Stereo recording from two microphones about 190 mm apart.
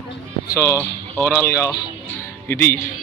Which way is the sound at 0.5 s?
15° left (ahead or behind).